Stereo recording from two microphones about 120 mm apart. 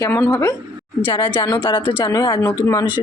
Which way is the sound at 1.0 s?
45° left (ahead or behind).